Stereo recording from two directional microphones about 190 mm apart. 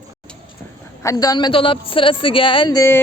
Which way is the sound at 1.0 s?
20° left (ahead or behind).